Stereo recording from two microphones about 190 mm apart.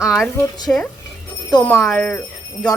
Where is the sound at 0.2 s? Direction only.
20° left (ahead or behind).